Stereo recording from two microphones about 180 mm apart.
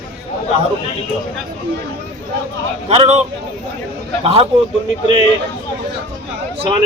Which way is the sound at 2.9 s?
35° right (ahead or behind).